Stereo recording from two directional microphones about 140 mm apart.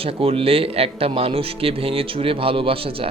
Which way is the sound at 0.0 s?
45° right (ahead or behind).